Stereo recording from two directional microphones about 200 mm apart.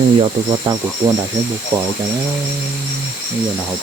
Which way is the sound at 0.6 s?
25° right (ahead or behind).